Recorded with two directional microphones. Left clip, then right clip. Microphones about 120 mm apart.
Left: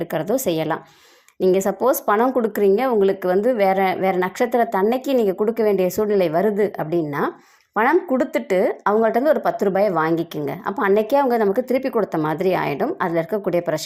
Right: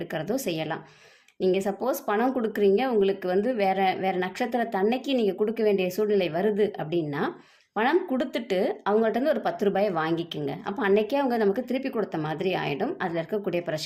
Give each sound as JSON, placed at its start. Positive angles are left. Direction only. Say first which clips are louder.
{"t": 0.0, "sound": "a woman's voice", "louder": "left 8 dB", "side_deg": 45}